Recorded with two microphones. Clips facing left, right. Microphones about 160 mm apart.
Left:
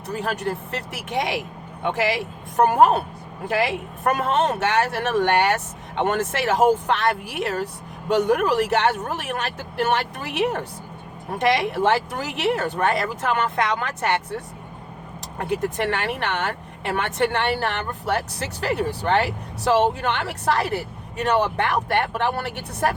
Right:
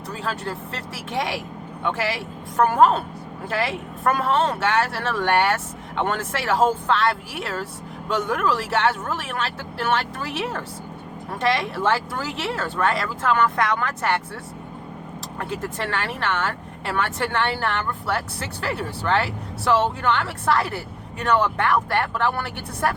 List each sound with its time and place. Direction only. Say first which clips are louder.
0.2 s speech: left 3 dB; 20° left (ahead or behind)